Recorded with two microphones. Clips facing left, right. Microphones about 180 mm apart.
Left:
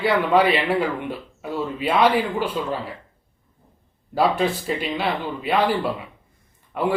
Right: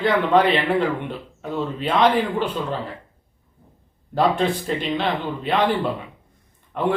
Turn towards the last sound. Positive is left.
turn(degrees=5)  # may be behind; listen again after turning